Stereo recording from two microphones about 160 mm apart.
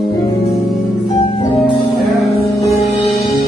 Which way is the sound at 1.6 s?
Centre (ahead or behind).